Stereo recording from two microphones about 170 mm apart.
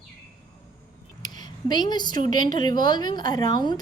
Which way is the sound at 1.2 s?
25° left (ahead or behind).